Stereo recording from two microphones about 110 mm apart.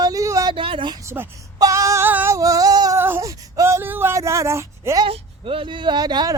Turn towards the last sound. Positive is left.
turn(degrees=-40)  # may be behind; listen again after turning